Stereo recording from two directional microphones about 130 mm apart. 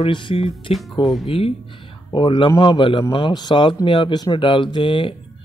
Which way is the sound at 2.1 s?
40° left (ahead or behind).